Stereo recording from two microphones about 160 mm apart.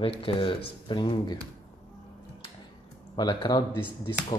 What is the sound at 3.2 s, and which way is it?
Speech, 25° left (ahead or behind).